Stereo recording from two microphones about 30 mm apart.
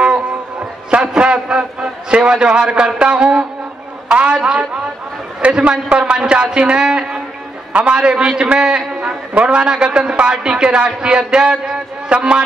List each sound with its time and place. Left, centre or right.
0.8 s a sound: right
3.0 s a man's voice: right
7.7 s a man's voice: right
8.0 s a man's voice: right
9.3 s a man's voice: right